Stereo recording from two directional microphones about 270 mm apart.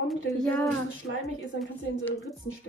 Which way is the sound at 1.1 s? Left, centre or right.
Left.